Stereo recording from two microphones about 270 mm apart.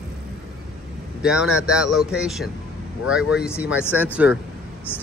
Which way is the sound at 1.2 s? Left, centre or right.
Centre.